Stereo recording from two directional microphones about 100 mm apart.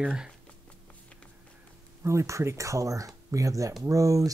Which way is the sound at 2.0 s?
30° right (ahead or behind).